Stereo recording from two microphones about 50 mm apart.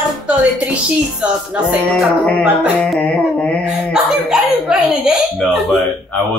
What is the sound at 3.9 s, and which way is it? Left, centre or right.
Speech, centre.